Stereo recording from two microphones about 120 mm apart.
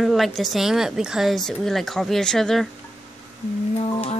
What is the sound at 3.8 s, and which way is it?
Music, 65° left (ahead or behind).